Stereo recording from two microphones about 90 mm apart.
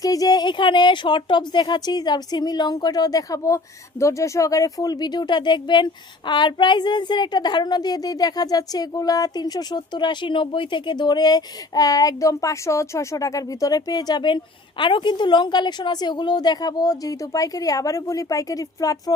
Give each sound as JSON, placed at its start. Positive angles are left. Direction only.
{"t": 0.0, "sound": "speech", "side_deg": 40}